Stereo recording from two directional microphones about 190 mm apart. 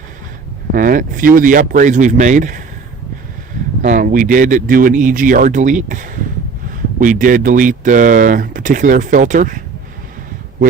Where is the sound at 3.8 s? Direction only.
40° right (ahead or behind).